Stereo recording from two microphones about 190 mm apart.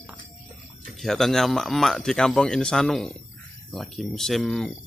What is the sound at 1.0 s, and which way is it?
Speech, centre (ahead or behind).